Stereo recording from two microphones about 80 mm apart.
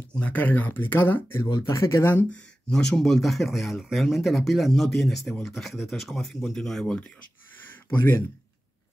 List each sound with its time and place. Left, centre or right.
0.1 s speech: centre; by 2.2 s left
2.3 s speech: centre